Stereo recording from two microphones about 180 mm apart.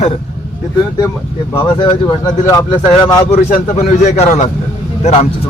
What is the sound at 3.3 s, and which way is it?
A man's voice, 35° left (ahead or behind).